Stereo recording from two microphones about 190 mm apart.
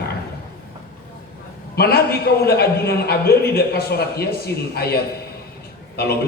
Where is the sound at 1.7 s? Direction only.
55° left (ahead or behind).